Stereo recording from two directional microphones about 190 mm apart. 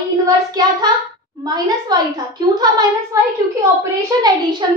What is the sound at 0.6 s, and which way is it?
A child's voice, 20° right (ahead or behind).